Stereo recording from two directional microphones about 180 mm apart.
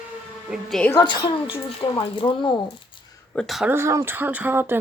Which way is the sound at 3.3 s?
Centre (ahead or behind).